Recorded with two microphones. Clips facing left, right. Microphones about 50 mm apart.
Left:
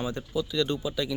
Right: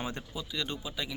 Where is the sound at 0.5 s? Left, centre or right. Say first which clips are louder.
Left 7 dB; centre.